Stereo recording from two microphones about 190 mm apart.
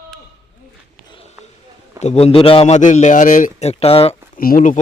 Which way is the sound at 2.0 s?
35° left (ahead or behind).